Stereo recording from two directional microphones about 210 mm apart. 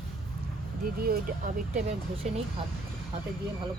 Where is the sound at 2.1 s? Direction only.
30° right (ahead or behind).